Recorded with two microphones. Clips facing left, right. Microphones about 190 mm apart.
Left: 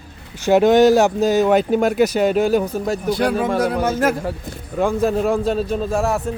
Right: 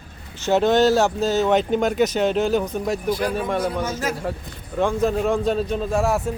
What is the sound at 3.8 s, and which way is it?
Speech, 55° left (ahead or behind).